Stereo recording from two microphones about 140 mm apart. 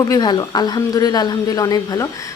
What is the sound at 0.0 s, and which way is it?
A woman's voice, 30° left (ahead or behind).